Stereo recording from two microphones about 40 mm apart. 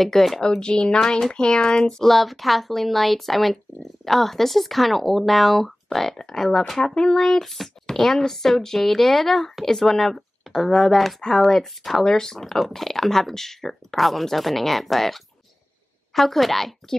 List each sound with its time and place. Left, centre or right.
0.0 s speech: centre
0.4 s speech: left
1.0 s speech: centre
2.0 s speech: centre
7.0 s speech: centre